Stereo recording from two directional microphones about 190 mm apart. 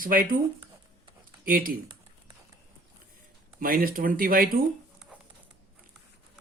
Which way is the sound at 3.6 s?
50° right (ahead or behind).